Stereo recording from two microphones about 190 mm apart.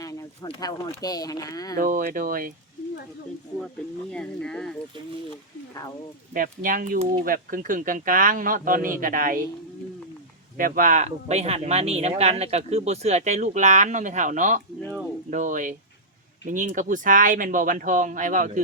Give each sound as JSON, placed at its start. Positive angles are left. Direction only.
{"t": 0.0, "sound": "a sound", "side_deg": 15}
{"t": 0.4, "sound": "speech", "side_deg": 25}
{"t": 1.8, "sound": "speech", "side_deg": -45}
{"t": 4.1, "sound": "speech", "side_deg": 5}
{"t": 6.3, "sound": "speech", "side_deg": -45}
{"t": 10.6, "sound": "speech", "side_deg": -45}